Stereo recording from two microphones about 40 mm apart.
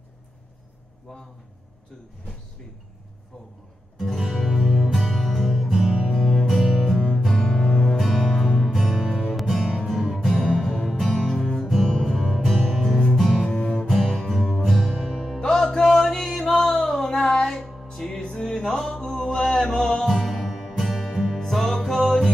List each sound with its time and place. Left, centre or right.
4.0 s music: centre
5.7 s music: centre
6.1 s music: centre
8.0 s music: centre
13.5 s music: centre
14.1 s music: centre
15.5 s chant: centre
18.2 s music: left
18.7 s mantra: centre
20.1 s music: centre